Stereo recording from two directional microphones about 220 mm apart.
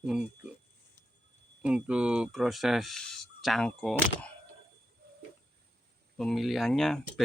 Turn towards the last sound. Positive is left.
turn(degrees=0)  # may be behind; listen again after turning